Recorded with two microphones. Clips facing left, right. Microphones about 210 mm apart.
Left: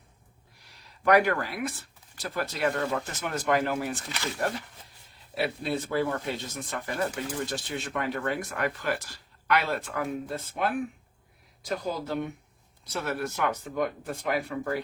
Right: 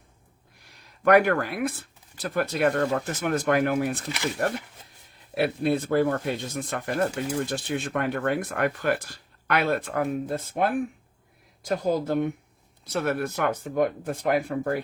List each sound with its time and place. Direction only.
0.7 s speech: 50° right (ahead or behind)
11.9 s speech: 50° right (ahead or behind)